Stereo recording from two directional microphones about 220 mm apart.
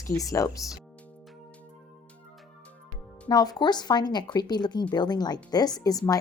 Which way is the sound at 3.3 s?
15° left (ahead or behind).